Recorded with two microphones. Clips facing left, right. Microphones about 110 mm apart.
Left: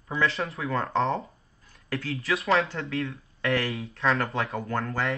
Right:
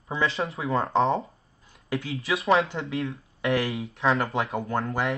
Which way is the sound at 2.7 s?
25° right (ahead or behind).